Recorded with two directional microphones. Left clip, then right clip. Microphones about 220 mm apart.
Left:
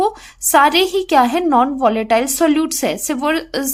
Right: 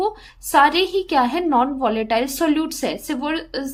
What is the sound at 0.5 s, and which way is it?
A woman's voice, 25° left (ahead or behind).